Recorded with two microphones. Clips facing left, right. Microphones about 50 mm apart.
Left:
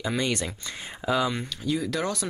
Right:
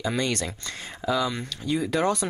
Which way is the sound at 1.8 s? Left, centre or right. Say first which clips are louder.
Right 8 dB; centre.